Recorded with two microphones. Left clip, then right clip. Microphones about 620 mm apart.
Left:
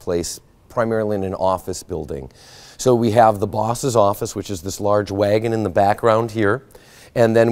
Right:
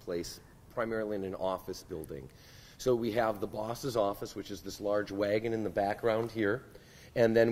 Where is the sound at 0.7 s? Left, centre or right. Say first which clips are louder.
Left 14 dB; left.